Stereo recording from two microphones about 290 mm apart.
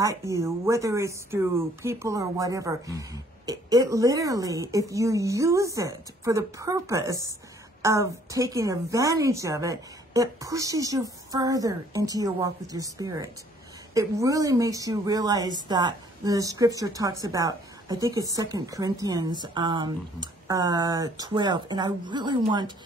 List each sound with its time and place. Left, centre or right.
0.0 s speech: centre